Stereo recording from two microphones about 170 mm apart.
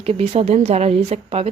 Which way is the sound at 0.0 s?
35° right (ahead or behind).